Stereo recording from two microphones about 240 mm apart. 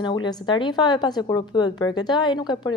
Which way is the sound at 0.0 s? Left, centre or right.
Centre.